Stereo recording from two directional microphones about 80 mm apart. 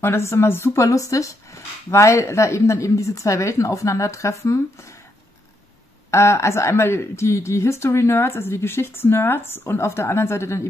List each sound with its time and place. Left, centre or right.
0.0 s a woman's voice: left
6.0 s a woman's voice: left